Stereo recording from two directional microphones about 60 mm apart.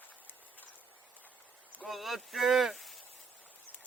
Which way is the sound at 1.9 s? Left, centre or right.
Centre.